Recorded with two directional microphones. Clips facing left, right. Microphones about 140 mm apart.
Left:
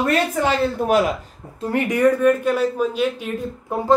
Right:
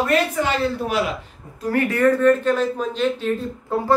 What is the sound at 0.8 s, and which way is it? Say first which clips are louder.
Speech: left 6 dB; 45° left (ahead or behind).